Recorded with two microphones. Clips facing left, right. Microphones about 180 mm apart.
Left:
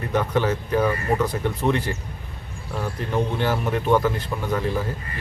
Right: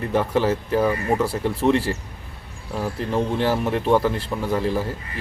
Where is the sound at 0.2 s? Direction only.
5° right (ahead or behind).